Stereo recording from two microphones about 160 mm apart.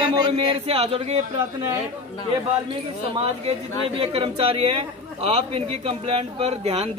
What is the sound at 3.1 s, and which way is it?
A man's voice, 40° right (ahead or behind).